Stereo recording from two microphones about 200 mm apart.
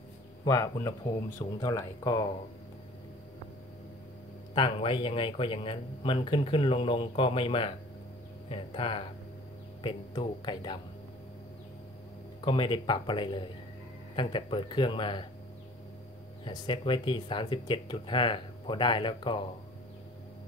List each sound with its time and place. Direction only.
0.5 s speech: 15° left (ahead or behind)
4.6 s speech: 25° left (ahead or behind)
12.4 s speech: 25° left (ahead or behind)
16.4 s speech: 25° left (ahead or behind)